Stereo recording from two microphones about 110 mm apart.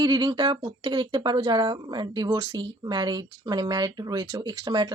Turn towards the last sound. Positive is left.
turn(degrees=-40)  # may be behind; listen again after turning